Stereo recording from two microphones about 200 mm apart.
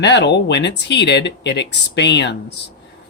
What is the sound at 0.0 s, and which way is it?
Speech, 60° left (ahead or behind).